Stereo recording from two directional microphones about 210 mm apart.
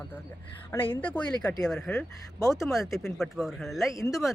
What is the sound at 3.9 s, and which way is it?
Speech, 15° left (ahead or behind).